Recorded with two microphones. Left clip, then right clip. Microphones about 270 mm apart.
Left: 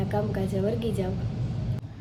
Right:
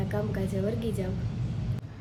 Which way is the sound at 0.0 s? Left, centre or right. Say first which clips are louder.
Left 3 dB; centre.